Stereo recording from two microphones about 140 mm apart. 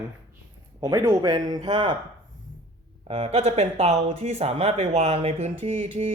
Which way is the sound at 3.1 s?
45° right (ahead or behind).